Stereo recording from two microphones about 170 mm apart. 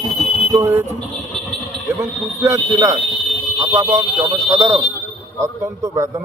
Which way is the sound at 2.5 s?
20° right (ahead or behind).